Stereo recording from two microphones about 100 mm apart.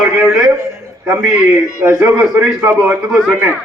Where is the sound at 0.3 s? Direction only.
5° right (ahead or behind).